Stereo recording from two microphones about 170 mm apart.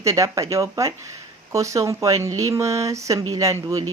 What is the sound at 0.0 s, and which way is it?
Speech, 20° right (ahead or behind).